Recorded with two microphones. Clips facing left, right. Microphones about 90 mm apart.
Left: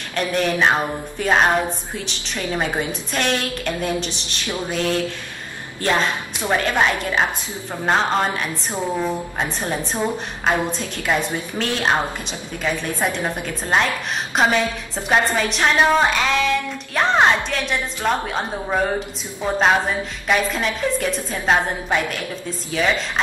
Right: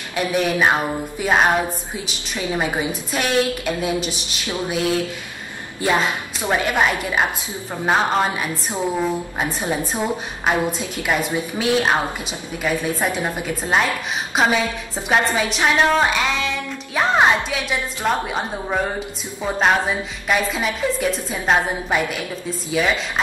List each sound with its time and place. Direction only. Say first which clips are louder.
0.1 s a woman's voice: right 1 dB; 10° right (ahead or behind)